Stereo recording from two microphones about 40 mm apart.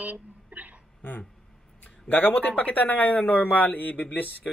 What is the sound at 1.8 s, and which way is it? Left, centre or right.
Speech, left.